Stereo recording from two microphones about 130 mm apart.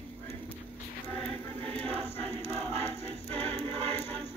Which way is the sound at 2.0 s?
15° left (ahead or behind).